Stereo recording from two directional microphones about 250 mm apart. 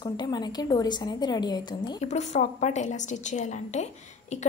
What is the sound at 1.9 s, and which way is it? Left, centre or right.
A woman's voice, left.